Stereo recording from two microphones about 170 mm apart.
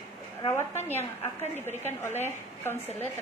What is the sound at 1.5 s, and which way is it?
A woman's voice, 15° left (ahead or behind).